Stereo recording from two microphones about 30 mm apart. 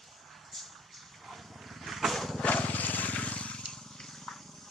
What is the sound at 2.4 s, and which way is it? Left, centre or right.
Vehicle, left.